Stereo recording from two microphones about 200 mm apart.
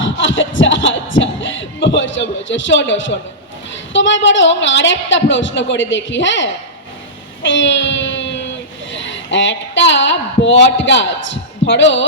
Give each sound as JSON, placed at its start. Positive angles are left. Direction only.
{"t": 0.0, "sound": "a sound", "side_deg": 70}
{"t": 3.7, "sound": "a woman's voice", "side_deg": 70}
{"t": 7.4, "sound": "child singing", "side_deg": 65}
{"t": 8.9, "sound": "a woman's voice", "side_deg": 65}